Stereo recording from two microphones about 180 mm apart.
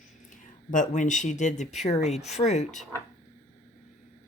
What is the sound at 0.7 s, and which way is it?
Speech, 45° left (ahead or behind).